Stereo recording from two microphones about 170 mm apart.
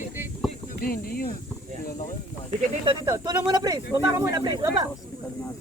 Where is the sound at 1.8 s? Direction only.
55° left (ahead or behind).